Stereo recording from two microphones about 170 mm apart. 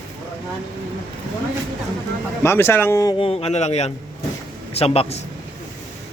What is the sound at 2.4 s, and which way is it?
Speech, 15° left (ahead or behind).